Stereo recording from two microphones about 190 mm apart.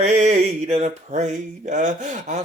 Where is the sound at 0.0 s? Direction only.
35° right (ahead or behind).